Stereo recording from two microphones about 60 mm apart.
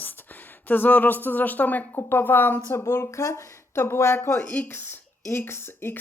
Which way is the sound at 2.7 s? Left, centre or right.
Left.